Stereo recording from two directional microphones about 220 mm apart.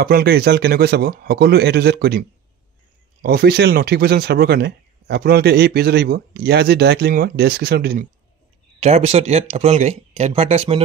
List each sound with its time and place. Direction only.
0.0 s speech: 45° right (ahead or behind)
8.7 s speech: 30° right (ahead or behind)